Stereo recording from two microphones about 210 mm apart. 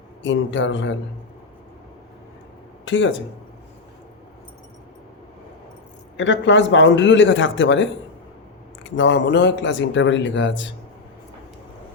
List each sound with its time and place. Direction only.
0.2 s speech: 65° left (ahead or behind)
2.8 s speech: 65° left (ahead or behind)
6.1 s speech: 60° left (ahead or behind)